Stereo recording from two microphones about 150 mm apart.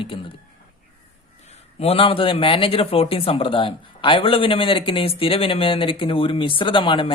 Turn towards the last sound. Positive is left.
turn(degrees=35)  # may be behind; listen again after turning